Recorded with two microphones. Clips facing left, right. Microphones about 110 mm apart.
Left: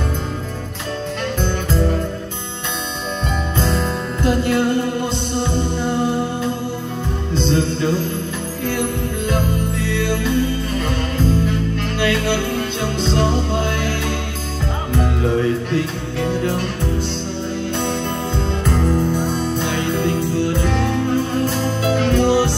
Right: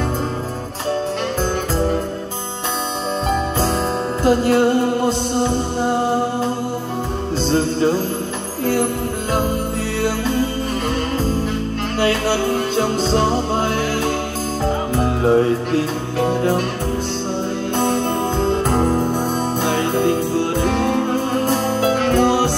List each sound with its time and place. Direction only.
3.5 s music: 35° right (ahead or behind)
10.0 s music: 40° right (ahead or behind)
12.0 s music: 40° right (ahead or behind)
17.7 s music: 45° right (ahead or behind)